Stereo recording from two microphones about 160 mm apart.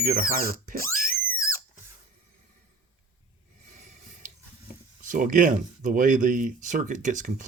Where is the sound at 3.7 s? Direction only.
50° right (ahead or behind).